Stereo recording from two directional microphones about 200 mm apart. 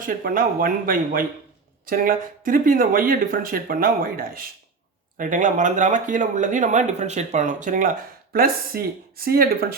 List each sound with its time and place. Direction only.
0.0 s speech: 45° right (ahead or behind)